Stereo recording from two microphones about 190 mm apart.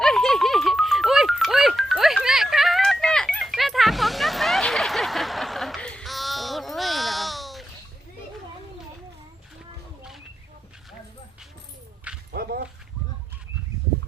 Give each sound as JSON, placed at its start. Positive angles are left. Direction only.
{"t": 0.0, "sound": "music", "side_deg": 0}
{"t": 12.3, "sound": "dog", "side_deg": -55}